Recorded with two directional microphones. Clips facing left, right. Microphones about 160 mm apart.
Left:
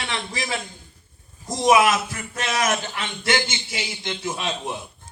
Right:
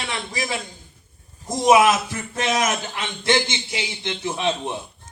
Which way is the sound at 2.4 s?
20° right (ahead or behind).